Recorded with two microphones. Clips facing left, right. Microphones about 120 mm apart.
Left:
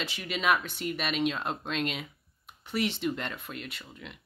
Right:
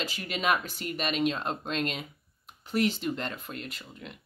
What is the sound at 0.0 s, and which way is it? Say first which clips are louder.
Speech: even; centre (ahead or behind).